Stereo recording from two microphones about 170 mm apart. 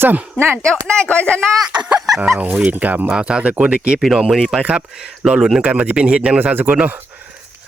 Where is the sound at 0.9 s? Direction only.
5° left (ahead or behind).